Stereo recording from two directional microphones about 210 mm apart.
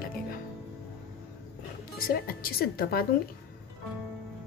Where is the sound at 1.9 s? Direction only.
45° left (ahead or behind).